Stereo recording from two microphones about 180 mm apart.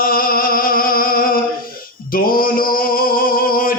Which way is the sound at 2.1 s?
50° left (ahead or behind).